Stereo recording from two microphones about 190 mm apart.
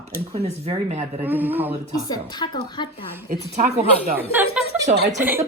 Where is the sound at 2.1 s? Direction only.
20° left (ahead or behind).